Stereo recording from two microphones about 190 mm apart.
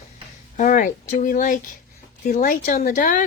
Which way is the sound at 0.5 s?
40° left (ahead or behind).